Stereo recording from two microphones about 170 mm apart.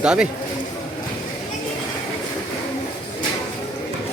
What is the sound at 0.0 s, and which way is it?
Speech, 5° right (ahead or behind).